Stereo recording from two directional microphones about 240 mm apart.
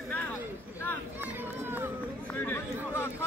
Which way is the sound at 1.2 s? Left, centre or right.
Centre.